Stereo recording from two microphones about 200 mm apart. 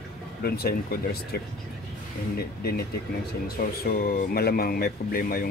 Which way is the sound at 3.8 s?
50° left (ahead or behind).